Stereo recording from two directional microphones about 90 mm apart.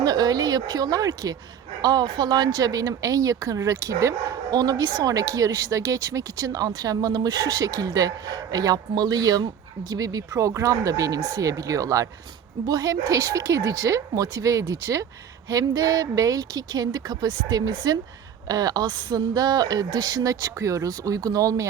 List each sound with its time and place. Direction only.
0.0 s speech: 50° right (ahead or behind)